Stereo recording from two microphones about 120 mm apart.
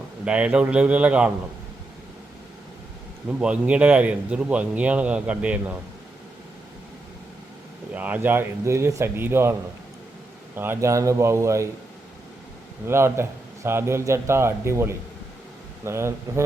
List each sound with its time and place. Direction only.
0.3 s speech: 10° right (ahead or behind)
3.2 s speech: 10° right (ahead or behind)
7.9 s speech: 15° right (ahead or behind)
12.9 s speech: 20° right (ahead or behind)